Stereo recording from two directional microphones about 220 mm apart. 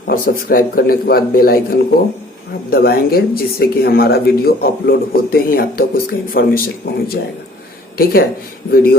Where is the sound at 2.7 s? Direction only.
45° left (ahead or behind).